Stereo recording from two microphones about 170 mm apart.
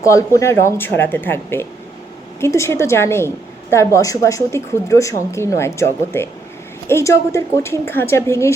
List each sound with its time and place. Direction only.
0.0 s a woman's voice: 20° left (ahead or behind)